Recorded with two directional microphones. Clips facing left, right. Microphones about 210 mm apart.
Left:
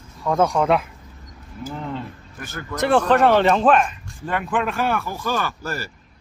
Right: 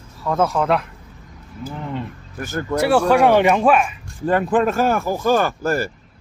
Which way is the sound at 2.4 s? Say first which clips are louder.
Right 9 dB; 45° right (ahead or behind).